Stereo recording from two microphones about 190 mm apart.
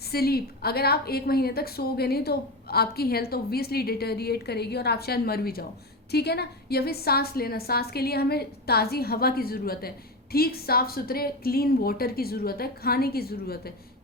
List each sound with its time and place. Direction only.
0.0 s a woman's voice: 55° left (ahead or behind)